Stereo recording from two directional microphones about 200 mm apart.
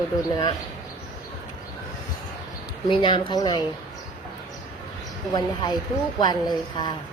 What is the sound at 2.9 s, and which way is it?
Speech, 25° left (ahead or behind).